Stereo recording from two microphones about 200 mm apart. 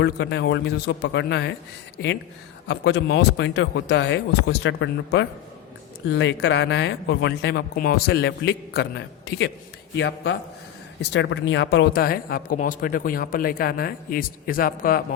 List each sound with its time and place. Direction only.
0.0 s speech: 60° left (ahead or behind)